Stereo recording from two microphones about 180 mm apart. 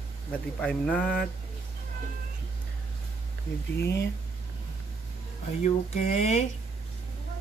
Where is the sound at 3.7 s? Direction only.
70° left (ahead or behind).